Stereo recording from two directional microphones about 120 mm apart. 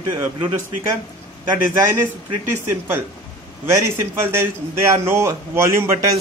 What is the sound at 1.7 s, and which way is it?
Speech, 25° right (ahead or behind).